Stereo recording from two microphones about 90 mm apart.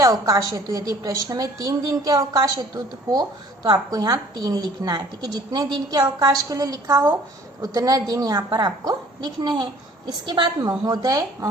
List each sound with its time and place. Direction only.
0.0 s a woman's voice: 40° right (ahead or behind)